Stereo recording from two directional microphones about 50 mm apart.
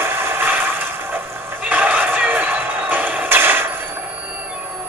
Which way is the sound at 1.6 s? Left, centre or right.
Right.